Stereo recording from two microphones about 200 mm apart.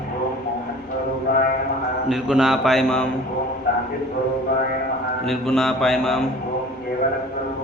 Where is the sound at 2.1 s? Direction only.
5° right (ahead or behind).